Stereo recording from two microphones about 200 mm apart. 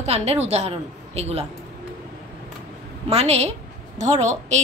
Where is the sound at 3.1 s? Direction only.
30° right (ahead or behind).